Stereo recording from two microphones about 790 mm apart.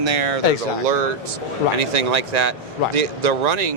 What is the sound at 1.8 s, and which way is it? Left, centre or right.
Speech, right.